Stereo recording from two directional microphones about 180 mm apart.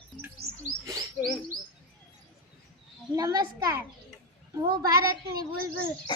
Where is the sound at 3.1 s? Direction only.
20° right (ahead or behind).